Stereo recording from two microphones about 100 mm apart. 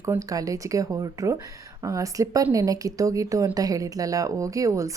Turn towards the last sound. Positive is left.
turn(degrees=-30)  # may be behind; listen again after turning